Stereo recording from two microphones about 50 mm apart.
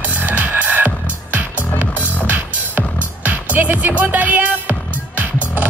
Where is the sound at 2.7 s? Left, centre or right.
Right.